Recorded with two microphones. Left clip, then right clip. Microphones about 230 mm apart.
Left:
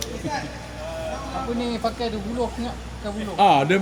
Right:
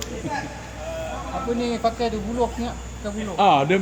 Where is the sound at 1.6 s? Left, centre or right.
Right.